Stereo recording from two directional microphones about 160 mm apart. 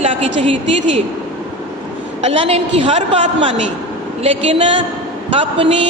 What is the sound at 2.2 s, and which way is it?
A woman's voice, 40° right (ahead or behind).